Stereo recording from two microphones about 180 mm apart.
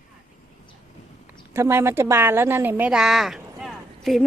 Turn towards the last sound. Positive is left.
turn(degrees=0)  # may be behind; listen again after turning